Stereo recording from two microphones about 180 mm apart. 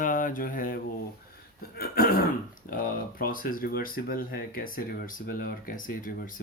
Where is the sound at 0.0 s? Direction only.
50° left (ahead or behind).